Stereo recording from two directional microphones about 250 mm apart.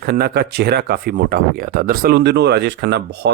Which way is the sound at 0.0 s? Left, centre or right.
Right.